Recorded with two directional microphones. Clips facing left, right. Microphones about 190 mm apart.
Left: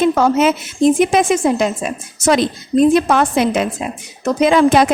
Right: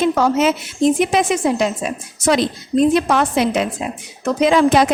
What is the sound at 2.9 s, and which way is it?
A woman's voice, 50° left (ahead or behind).